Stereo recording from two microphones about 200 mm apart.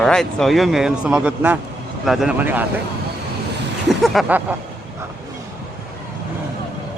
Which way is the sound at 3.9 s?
Centre (ahead or behind).